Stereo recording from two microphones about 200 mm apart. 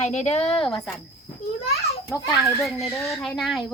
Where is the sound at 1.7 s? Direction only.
30° left (ahead or behind).